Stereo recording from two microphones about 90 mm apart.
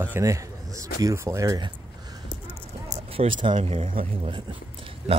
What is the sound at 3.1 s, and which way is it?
Speech, 80° right.